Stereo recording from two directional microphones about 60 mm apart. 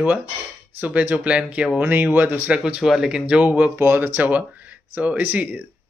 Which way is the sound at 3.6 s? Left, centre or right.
Right.